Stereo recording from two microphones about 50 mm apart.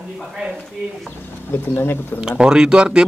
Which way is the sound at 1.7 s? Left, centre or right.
Left.